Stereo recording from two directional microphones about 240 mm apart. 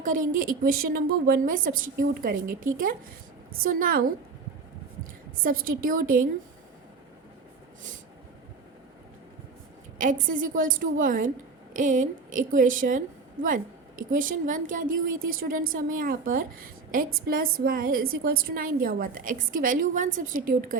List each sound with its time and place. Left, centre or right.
0.0 s a woman's voice: right
5.8 s a woman's voice: right
10.0 s a woman's voice: right